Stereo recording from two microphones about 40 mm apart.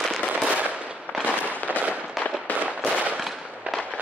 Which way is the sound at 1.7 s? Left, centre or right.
Right.